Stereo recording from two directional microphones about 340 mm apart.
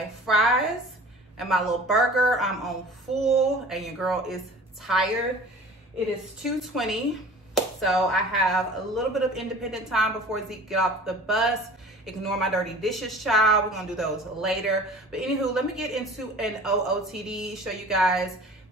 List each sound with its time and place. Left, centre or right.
0.3 s a woman's voice: centre
6.4 s a woman's voice: centre